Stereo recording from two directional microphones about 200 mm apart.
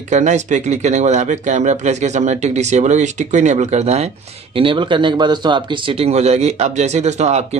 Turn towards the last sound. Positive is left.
turn(degrees=-35)  # may be behind; listen again after turning